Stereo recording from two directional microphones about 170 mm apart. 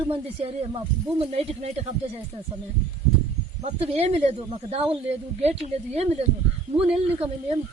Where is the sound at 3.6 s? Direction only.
35° right (ahead or behind).